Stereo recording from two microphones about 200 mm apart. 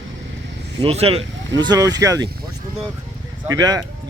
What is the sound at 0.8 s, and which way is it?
Speech, 30° right (ahead or behind).